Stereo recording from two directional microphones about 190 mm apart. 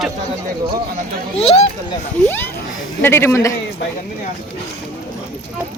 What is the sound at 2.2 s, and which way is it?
A man's voice, 10° left (ahead or behind).